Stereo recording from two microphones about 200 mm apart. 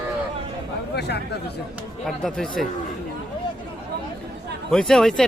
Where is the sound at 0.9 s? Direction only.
55° left (ahead or behind).